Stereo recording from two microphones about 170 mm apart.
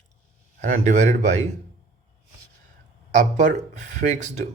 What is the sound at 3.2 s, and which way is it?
A man's voice, 45° right (ahead or behind).